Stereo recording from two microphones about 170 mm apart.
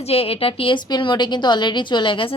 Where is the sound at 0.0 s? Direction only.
35° left (ahead or behind).